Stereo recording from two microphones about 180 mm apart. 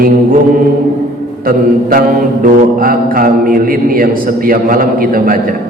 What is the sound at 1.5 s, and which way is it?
Mantra, 50° right (ahead or behind).